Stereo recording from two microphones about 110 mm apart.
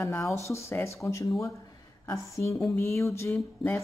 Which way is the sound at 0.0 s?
25° left (ahead or behind).